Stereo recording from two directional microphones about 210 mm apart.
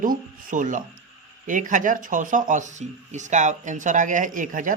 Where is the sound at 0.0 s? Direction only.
40° right (ahead or behind).